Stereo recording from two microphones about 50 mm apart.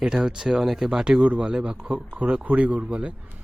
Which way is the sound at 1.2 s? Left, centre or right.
Right.